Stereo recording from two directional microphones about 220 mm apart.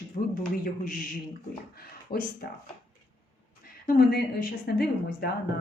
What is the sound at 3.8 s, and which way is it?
A woman's voice, 45° left (ahead or behind).